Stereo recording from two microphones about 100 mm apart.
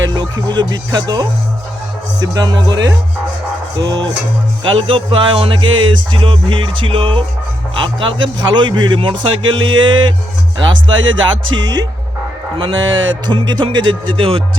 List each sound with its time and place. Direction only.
0.1 s a man's voice: 45° right (ahead or behind)
2.2 s music: 40° right (ahead or behind)
3.8 s a man's voice: 45° right (ahead or behind)
4.8 s music: 65° right (ahead or behind)
7.8 s a man's voice: 55° right (ahead or behind)
13.7 s music: 55° right (ahead or behind)